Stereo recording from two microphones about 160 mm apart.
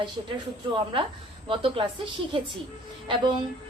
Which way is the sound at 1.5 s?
35° right (ahead or behind).